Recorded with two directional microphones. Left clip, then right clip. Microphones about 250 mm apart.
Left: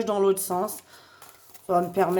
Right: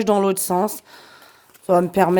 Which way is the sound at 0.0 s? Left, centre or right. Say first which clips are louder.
Right 5 dB; right.